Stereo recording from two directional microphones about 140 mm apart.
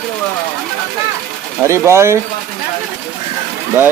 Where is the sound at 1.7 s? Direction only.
20° right (ahead or behind).